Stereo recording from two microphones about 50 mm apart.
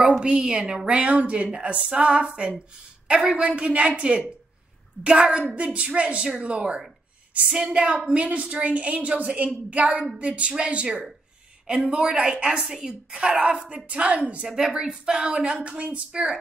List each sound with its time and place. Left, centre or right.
0.0 s a woman's voice: centre
13.8 s a woman's voice: right